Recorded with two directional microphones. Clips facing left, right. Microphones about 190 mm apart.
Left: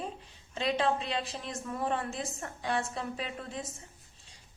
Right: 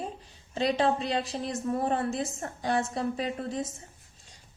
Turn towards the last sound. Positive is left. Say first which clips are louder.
# right 7 dB
turn(degrees=-35)  # may be behind; listen again after turning